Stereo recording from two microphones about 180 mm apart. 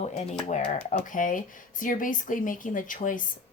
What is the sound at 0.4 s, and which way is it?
A woman's voice, 40° left (ahead or behind).